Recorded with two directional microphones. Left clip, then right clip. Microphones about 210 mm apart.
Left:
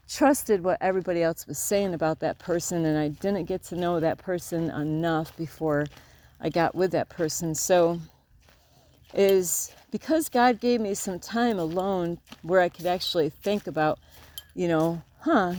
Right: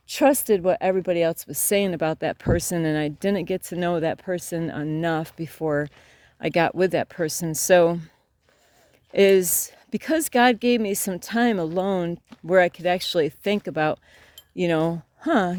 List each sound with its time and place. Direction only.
0.1 s speech: 35° right (ahead or behind)
9.1 s speech: 35° right (ahead or behind)